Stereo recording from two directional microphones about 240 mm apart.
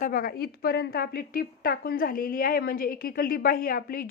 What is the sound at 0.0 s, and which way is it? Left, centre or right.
A woman's voice, left.